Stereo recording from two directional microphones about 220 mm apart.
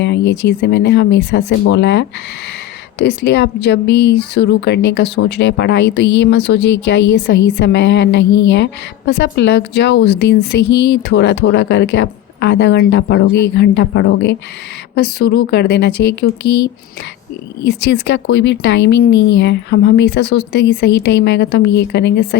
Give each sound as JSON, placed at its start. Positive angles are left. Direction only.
{"t": 0.0, "sound": "a woman's voice", "side_deg": 50}
{"t": 17.6, "sound": "a woman's voice", "side_deg": 55}